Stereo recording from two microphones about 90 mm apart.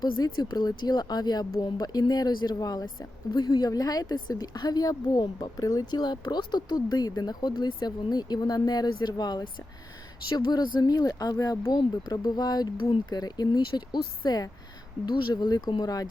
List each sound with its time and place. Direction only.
0.0 s a woman's voice: 50° left (ahead or behind)
12.8 s speech: 65° left (ahead or behind)
13.1 s a woman's voice: 50° left (ahead or behind)